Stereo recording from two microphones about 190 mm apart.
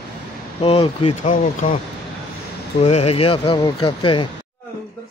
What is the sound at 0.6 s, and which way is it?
Speech, 30° left (ahead or behind).